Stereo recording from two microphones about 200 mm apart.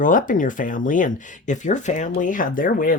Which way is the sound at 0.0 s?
40° left (ahead or behind).